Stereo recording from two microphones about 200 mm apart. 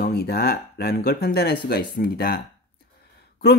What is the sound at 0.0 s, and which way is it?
Speech, 55° left (ahead or behind).